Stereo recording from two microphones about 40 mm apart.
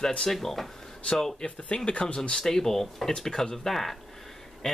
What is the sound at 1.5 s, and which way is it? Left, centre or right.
Speech, left.